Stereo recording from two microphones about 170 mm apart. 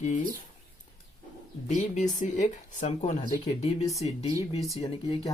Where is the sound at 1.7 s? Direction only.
45° left (ahead or behind).